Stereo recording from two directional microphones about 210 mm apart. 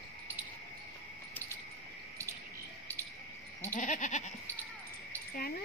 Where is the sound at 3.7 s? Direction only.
35° left (ahead or behind).